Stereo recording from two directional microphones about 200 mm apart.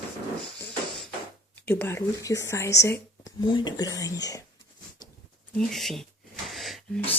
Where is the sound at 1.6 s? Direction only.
10° left (ahead or behind).